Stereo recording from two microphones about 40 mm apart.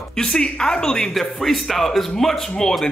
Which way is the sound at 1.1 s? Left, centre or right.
Centre.